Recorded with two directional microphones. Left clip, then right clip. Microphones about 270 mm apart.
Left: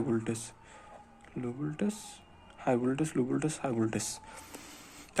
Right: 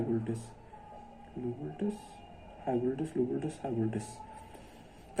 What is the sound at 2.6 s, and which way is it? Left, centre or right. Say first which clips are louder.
Speech: left 3 dB; left.